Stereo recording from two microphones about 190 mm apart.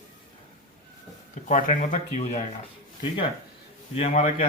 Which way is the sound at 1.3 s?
40° left (ahead or behind).